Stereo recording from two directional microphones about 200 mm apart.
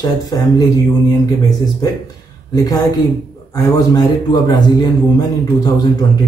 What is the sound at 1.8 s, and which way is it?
Speech, 20° left (ahead or behind).